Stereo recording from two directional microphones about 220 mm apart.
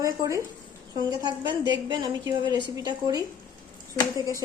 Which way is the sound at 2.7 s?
20° right (ahead or behind).